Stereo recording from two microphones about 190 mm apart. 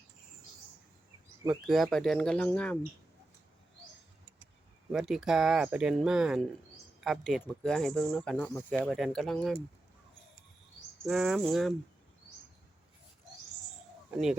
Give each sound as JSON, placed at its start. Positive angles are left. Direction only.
{"t": 1.5, "sound": "speech", "side_deg": 0}
{"t": 4.9, "sound": "speech", "side_deg": 0}
{"t": 11.0, "sound": "speech", "side_deg": -5}
{"t": 14.1, "sound": "speech", "side_deg": -5}